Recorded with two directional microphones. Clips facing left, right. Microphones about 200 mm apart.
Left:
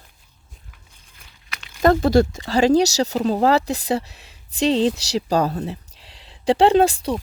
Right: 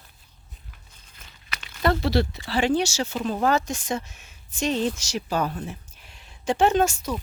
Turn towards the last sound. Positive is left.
turn(degrees=30)  # may be behind; listen again after turning